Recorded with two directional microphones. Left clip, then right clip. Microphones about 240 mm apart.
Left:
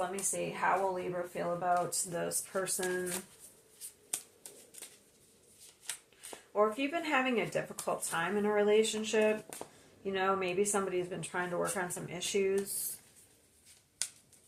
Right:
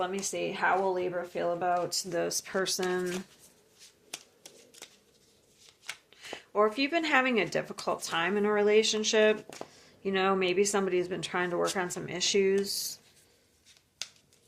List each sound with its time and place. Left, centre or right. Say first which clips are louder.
0.0 s speech: right 4 dB; right
6.3 s speech: right 4 dB; right
14.0 s a sound: right 1 dB; right